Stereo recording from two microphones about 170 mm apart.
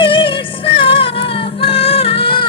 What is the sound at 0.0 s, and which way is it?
Music, 30° left (ahead or behind).